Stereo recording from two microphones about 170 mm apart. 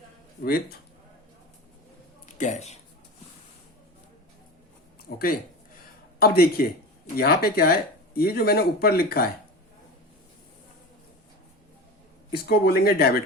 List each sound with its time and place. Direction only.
0.4 s speech: 60° left (ahead or behind)
2.2 s speech: 45° left (ahead or behind)
6.1 s speech: 65° left (ahead or behind)
12.3 s speech: 65° left (ahead or behind)